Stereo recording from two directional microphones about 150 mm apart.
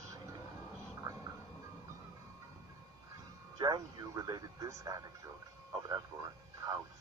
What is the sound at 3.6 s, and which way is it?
Speech, 30° right (ahead or behind).